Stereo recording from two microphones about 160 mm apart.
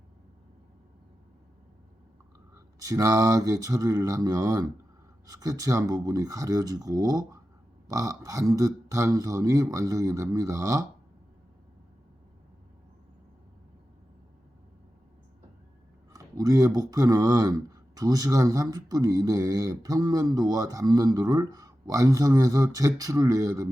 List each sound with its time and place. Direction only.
2.7 s speech: 20° right (ahead or behind)
16.1 s speech: 20° right (ahead or behind)